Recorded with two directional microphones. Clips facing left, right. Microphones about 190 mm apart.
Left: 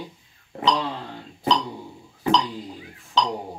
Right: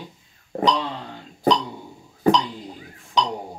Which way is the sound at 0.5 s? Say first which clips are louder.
Right 4 dB; 40° right (ahead or behind).